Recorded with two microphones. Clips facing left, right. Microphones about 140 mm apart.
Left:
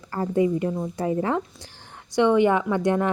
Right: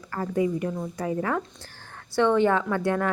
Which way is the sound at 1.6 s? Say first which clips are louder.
Even; 15° left (ahead or behind).